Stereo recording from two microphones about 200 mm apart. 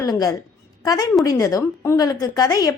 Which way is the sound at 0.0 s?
15° left (ahead or behind).